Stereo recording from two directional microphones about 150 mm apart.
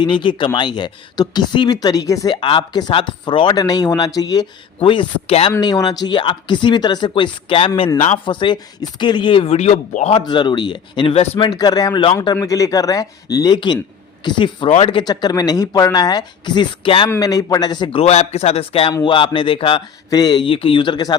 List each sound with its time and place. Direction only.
0.0 s speech: 30° left (ahead or behind)
4.8 s speech: 35° left (ahead or behind)
10.1 s speech: 30° left (ahead or behind)
18.0 s a man's voice: 50° left (ahead or behind)
20.1 s speech: 25° left (ahead or behind)